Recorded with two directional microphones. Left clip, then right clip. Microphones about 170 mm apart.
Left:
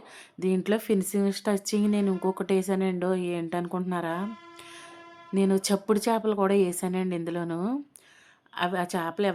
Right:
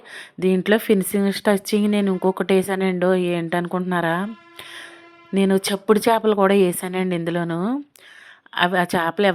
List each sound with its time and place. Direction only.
0.1 s speech: 25° right (ahead or behind)